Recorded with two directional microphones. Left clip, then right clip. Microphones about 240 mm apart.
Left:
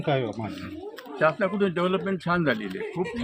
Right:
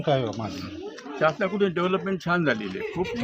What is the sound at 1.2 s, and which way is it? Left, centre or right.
A man's voice, centre.